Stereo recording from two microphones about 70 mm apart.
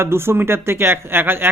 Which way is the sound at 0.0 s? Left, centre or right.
Right.